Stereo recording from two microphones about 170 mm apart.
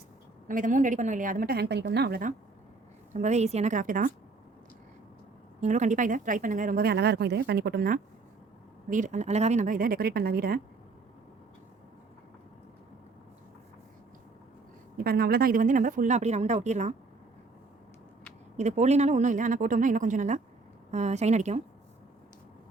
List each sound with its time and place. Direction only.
0.4 s speech: 50° right (ahead or behind)
3.1 s speech: 45° right (ahead or behind)
5.5 s speech: 45° right (ahead or behind); by 10.6 s 60° right (ahead or behind)
15.0 s speech: 60° right (ahead or behind); by 16.9 s 45° right (ahead or behind)
18.5 s speech: 40° right (ahead or behind)